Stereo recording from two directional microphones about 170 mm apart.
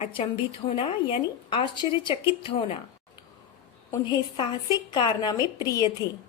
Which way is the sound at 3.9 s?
25° left (ahead or behind).